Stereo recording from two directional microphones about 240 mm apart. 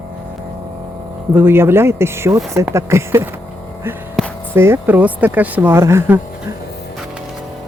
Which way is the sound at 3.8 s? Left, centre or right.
Centre.